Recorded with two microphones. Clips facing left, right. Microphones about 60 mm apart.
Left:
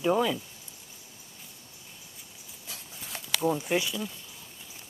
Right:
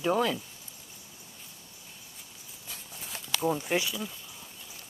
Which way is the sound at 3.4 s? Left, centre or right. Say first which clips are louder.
Left 1 dB; centre.